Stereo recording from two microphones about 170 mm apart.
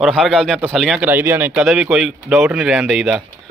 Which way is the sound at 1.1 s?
10° right (ahead or behind).